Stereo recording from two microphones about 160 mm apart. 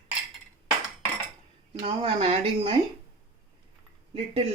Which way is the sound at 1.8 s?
35° right (ahead or behind).